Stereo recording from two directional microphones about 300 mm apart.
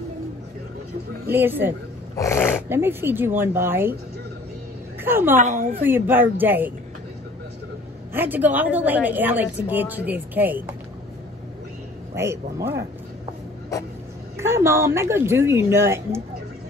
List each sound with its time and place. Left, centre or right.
1.3 s speech: centre
2.1 s speech: centre
2.7 s speech: centre
5.0 s speech: centre
5.4 s a woman's voice: right
5.8 s speech: centre
8.1 s a woman's voice: centre
12.2 s speech: centre
14.4 s speech: centre